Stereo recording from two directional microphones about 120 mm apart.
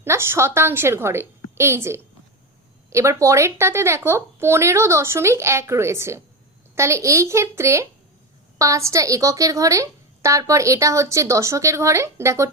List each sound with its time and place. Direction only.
0.0 s a woman's voice: 20° right (ahead or behind)